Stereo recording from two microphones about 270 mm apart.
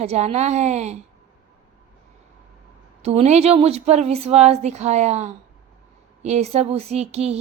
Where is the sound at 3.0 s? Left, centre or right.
Right.